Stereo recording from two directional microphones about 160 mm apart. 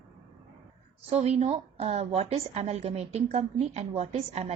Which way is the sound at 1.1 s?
40° right (ahead or behind).